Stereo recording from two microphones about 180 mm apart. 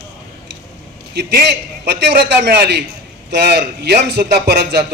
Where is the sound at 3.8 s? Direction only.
60° right (ahead or behind).